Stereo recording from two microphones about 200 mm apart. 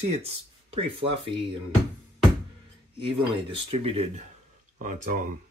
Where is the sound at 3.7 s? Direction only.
30° right (ahead or behind).